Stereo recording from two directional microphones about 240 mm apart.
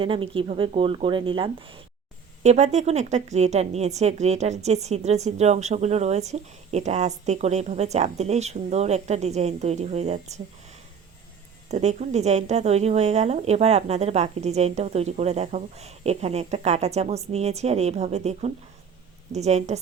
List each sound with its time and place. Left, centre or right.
0.0 s a woman's voice: right
11.7 s a woman's voice: right